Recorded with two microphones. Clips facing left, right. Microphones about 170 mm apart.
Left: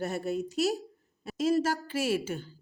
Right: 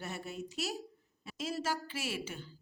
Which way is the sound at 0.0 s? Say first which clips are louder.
Left 10 dB; 40° left (ahead or behind).